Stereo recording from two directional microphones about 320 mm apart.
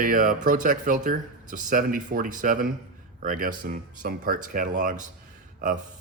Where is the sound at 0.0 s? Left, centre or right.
Right.